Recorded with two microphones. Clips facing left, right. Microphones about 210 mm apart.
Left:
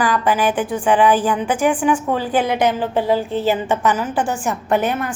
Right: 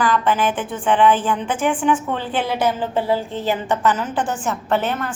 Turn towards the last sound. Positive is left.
turn(degrees=10)  # may be behind; listen again after turning